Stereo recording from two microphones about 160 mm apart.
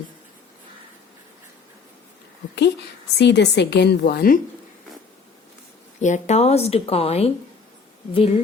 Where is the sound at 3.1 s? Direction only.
90° left; by 4.4 s 65° left (ahead or behind).